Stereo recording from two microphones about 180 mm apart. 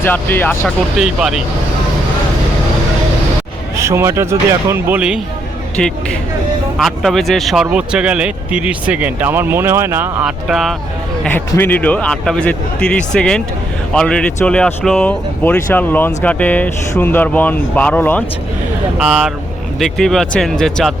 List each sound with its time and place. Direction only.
0.0 s speech: 10° left (ahead or behind)
0.9 s speech: 5° right (ahead or behind)
3.8 s speech: 15° right (ahead or behind)
6.7 s speech: centre (ahead or behind)
10.5 s speech: centre (ahead or behind)
18.9 s speech: 5° right (ahead or behind)